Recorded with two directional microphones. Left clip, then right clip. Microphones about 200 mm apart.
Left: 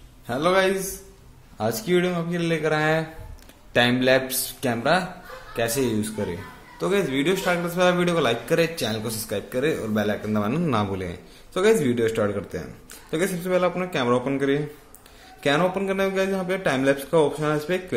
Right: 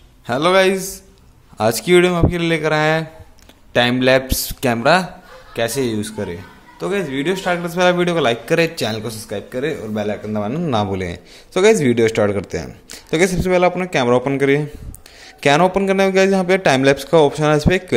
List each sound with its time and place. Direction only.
0.3 s a man's voice: 30° right (ahead or behind)
5.5 s a man's voice: 20° right (ahead or behind)
7.5 s a man's voice: 25° right (ahead or behind)
9.0 s a man's voice: 15° right (ahead or behind)
10.8 s a man's voice: 25° right (ahead or behind)